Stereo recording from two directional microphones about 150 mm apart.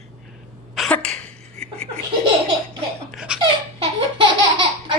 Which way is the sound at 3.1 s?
5° right (ahead or behind).